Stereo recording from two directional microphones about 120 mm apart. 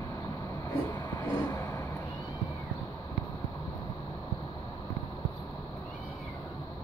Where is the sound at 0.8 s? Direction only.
30° left (ahead or behind).